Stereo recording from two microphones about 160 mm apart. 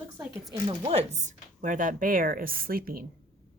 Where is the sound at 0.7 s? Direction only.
40° right (ahead or behind); by 3.1 s 65° right (ahead or behind).